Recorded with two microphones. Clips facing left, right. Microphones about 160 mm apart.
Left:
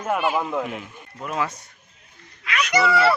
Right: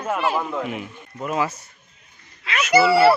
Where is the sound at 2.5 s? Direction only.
30° right (ahead or behind).